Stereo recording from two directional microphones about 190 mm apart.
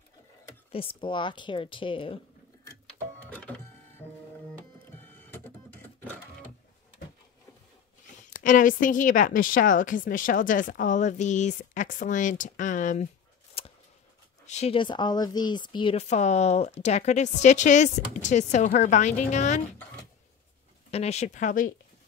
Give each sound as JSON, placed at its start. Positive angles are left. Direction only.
{"t": 0.7, "sound": "a woman's voice", "side_deg": 30}
{"t": 3.3, "sound": "printer", "side_deg": 10}
{"t": 5.3, "sound": "printer", "side_deg": 10}
{"t": 8.2, "sound": "a woman's voice", "side_deg": 40}
{"t": 13.6, "sound": "a sound", "side_deg": 30}
{"t": 14.4, "sound": "speech", "side_deg": 35}
{"t": 20.9, "sound": "speech", "side_deg": 35}